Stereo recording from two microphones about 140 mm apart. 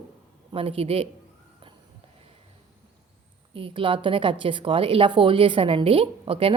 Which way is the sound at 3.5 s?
40° right (ahead or behind).